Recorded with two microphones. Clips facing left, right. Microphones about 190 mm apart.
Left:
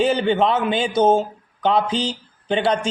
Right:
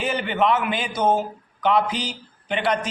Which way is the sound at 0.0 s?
30° left (ahead or behind).